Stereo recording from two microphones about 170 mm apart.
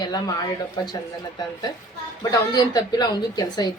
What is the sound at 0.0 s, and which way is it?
Speech, 25° left (ahead or behind).